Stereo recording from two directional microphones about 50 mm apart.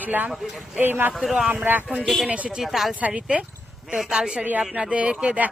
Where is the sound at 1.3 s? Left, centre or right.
Centre.